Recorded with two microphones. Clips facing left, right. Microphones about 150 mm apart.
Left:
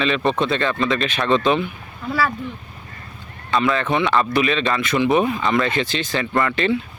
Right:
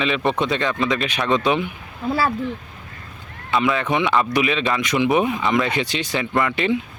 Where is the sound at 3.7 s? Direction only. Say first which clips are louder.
Left 1 dB; 15° right (ahead or behind).